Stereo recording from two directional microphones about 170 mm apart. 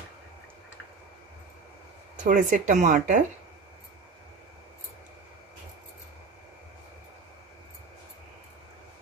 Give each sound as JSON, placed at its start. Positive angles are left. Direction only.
{"t": 2.2, "sound": "speech", "side_deg": -50}